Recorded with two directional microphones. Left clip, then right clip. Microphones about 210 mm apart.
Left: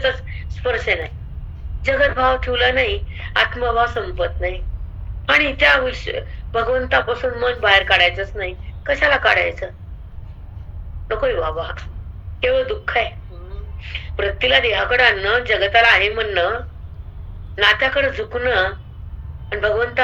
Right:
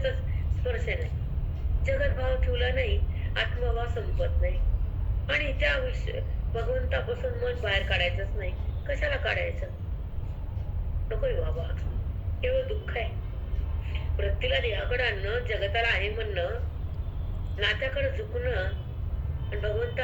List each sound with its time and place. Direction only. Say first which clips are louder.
0.0 s a sound: left 11 dB; 45° left (ahead or behind)
1.8 s a man's voice: left 14 dB; 45° left (ahead or behind)
11.1 s a man's voice: left 12 dB; 45° left (ahead or behind)
17.6 s a man's voice: left 13 dB; 45° left (ahead or behind)